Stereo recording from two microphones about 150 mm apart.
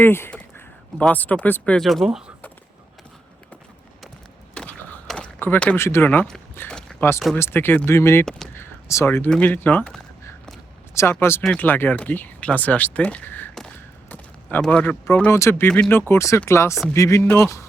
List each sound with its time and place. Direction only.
0.0 s speech: 15° left (ahead or behind); by 2.3 s 5° right (ahead or behind)
4.5 s a sound: 5° left (ahead or behind)
6.6 s speech: 5° left (ahead or behind)
8.2 s speech: 5° left (ahead or behind)
8.5 s speech: 15° left (ahead or behind)